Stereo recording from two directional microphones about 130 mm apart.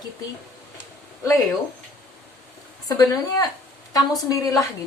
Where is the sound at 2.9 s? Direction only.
30° left (ahead or behind).